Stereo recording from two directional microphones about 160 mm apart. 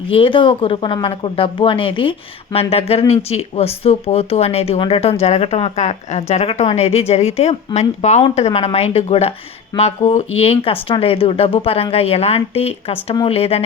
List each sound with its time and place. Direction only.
0.1 s a woman's voice: 35° left (ahead or behind)